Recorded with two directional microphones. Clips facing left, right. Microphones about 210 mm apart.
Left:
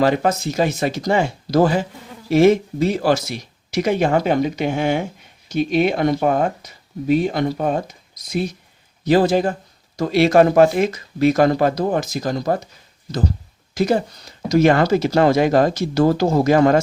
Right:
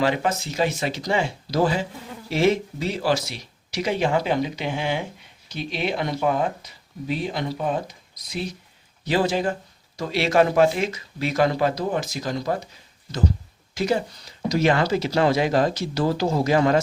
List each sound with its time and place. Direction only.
0.0 s speech: 40° left (ahead or behind)
13.7 s speech: 45° left (ahead or behind)